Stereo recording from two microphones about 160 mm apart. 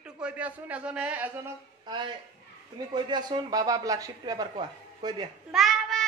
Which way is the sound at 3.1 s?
25° right (ahead or behind).